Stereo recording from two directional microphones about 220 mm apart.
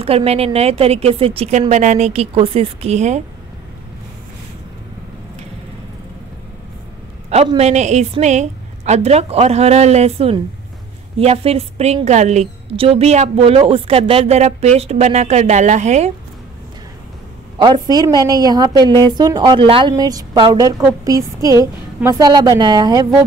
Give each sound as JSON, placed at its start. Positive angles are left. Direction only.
{"t": 0.0, "sound": "a woman's voice", "side_deg": -25}
{"t": 7.2, "sound": "a woman's voice", "side_deg": -30}
{"t": 17.8, "sound": "a woman's voice", "side_deg": -15}